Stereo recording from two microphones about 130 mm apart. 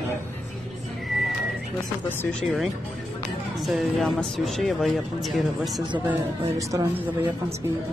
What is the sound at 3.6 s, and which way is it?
Speech, centre (ahead or behind).